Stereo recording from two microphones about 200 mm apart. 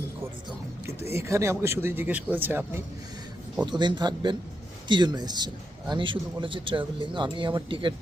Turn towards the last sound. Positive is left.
turn(degrees=-25)  # may be behind; listen again after turning